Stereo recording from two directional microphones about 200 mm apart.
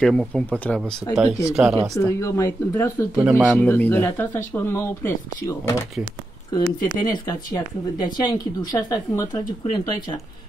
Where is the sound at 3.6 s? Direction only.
10° left (ahead or behind).